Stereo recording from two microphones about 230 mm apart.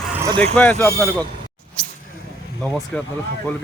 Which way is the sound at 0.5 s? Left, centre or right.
Centre.